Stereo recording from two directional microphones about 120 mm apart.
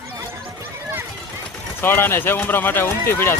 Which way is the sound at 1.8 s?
20° left (ahead or behind).